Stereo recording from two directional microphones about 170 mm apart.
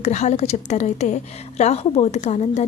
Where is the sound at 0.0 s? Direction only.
40° left (ahead or behind).